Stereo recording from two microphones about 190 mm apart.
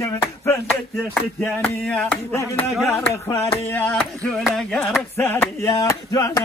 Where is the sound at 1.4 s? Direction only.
5° left (ahead or behind).